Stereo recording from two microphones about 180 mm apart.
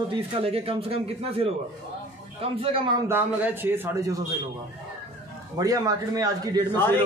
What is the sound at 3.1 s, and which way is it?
A man's voice, 10° right (ahead or behind).